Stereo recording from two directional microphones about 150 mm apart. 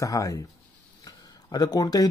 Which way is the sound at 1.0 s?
25° left (ahead or behind).